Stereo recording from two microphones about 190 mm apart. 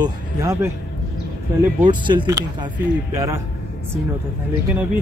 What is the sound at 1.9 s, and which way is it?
Speech, 25° right (ahead or behind).